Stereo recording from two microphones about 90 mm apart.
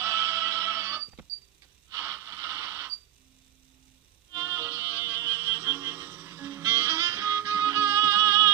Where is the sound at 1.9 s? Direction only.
25° right (ahead or behind).